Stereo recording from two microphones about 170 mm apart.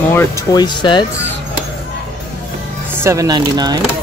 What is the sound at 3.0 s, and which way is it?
Speech, 20° right (ahead or behind).